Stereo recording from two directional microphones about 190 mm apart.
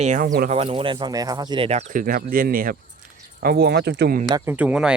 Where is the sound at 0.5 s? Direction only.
30° right (ahead or behind); by 4.2 s 60° right (ahead or behind).